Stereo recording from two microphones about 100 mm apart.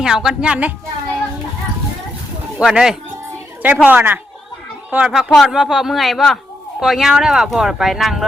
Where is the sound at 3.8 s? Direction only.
15° right (ahead or behind).